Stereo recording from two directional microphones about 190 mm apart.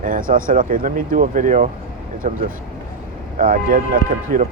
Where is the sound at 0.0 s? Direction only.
45° right (ahead or behind).